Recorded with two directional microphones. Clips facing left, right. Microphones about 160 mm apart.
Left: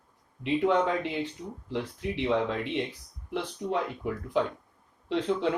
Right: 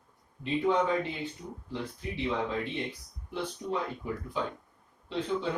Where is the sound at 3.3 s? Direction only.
85° left.